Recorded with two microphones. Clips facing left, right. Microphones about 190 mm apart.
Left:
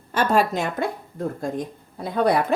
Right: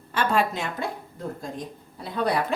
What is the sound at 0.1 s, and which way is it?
Speech, 40° left (ahead or behind).